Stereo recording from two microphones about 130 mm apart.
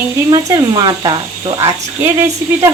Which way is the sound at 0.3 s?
30° right (ahead or behind).